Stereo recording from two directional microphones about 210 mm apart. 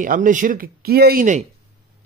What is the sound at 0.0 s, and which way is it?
Speech, 40° right (ahead or behind).